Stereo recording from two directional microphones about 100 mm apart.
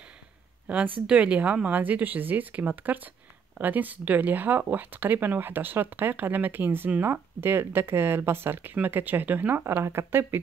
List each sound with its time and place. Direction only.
0.7 s speech: 10° right (ahead or behind)